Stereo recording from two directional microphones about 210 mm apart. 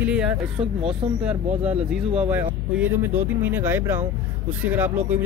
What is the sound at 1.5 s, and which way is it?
Speech, 35° right (ahead or behind).